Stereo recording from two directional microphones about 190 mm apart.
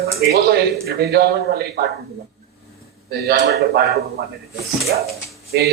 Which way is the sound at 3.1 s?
60° right (ahead or behind).